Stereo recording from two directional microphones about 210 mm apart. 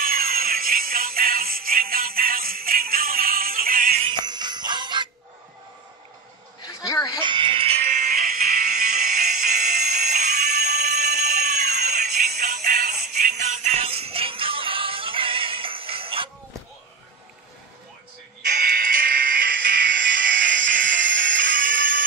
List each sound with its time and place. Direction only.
0.0 s music: 45° right (ahead or behind)
4.0 s jingle bell: 20° right (ahead or behind)
6.6 s a sound: 15° left (ahead or behind)
7.2 s music: 25° right (ahead or behind)
11.1 s fire alarm: 35° right (ahead or behind)
11.7 s music: 35° right (ahead or behind)
12.1 s music: 50° right (ahead or behind)
12.4 s jingle bell: 40° right (ahead or behind); by 16.3 s 25° right (ahead or behind)
18.5 s music: 45° right (ahead or behind)
21.1 s music: 60° right (ahead or behind)